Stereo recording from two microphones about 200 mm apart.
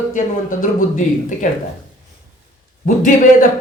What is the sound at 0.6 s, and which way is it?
Speech, 40° left (ahead or behind).